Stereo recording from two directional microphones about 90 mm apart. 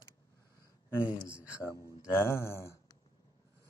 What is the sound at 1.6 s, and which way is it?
Speech, 35° left (ahead or behind).